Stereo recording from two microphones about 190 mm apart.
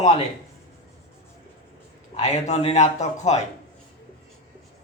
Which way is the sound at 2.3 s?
35° left (ahead or behind).